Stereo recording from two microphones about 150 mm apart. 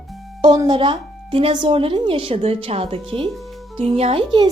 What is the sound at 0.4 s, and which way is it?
A woman's voice, 30° right (ahead or behind).